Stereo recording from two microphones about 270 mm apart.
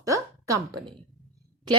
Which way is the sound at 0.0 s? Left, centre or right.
Centre.